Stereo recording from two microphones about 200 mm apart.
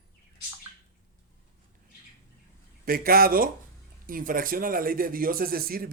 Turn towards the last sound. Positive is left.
turn(degrees=-50)  # may be behind; listen again after turning